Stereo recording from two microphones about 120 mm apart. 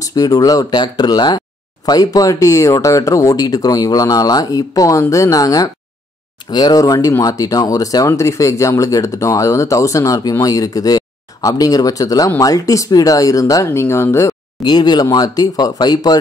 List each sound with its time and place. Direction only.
0.0 s speech: 30° left (ahead or behind)
14.6 s speech: 35° left (ahead or behind)